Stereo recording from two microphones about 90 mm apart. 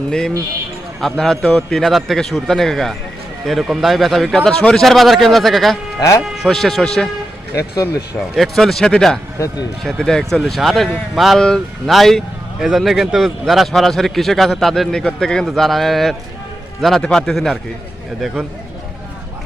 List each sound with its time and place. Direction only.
0.1 s speech: 5° left (ahead or behind)
6.0 s speech: 35° left (ahead or behind)
6.3 s speech: centre (ahead or behind)
8.4 s speech: centre (ahead or behind)